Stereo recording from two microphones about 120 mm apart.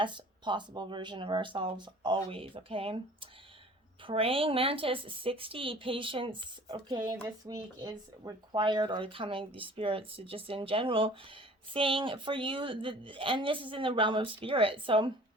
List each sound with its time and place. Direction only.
0.0 s speech: 40° right (ahead or behind)
2.1 s speech: 50° right (ahead or behind)